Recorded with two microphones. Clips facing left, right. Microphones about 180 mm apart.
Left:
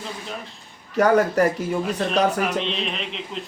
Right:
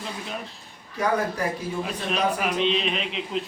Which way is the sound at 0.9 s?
70° left (ahead or behind).